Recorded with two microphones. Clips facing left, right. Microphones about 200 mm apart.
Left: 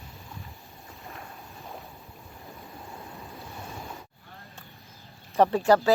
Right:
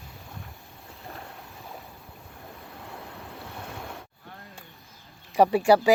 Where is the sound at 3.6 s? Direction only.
70° right (ahead or behind).